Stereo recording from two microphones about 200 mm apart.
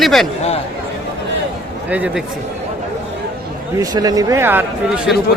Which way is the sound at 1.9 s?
5° right (ahead or behind).